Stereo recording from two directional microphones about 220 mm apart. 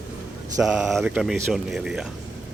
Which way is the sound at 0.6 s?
Centre (ahead or behind).